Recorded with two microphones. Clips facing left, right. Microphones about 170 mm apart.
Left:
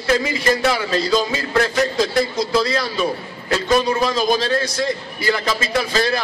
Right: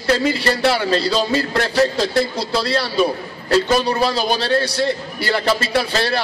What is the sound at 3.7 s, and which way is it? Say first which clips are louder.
A man's voice: even; 35° right (ahead or behind).